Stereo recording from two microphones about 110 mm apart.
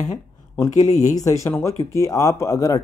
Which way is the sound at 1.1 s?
30° left (ahead or behind).